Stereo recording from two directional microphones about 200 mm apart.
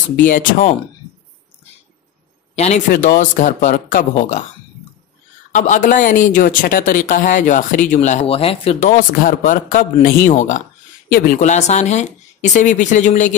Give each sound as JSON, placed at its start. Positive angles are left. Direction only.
{"t": 0.2, "sound": "speech", "side_deg": 40}
{"t": 2.5, "sound": "speech", "side_deg": 35}
{"t": 2.9, "sound": "speech", "side_deg": 45}
{"t": 5.5, "sound": "speech", "side_deg": 40}